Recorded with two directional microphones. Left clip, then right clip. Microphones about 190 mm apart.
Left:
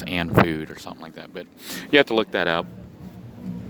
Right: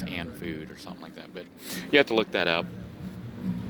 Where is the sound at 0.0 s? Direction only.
40° left (ahead or behind).